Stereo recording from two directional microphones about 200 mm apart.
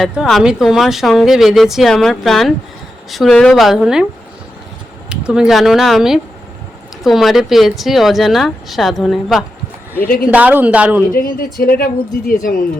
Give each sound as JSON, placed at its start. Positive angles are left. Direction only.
{"t": 0.0, "sound": "speech", "side_deg": 0}
{"t": 5.0, "sound": "a woman's voice", "side_deg": -5}
{"t": 11.1, "sound": "speech", "side_deg": 45}